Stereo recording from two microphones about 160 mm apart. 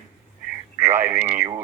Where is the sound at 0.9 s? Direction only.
15° right (ahead or behind).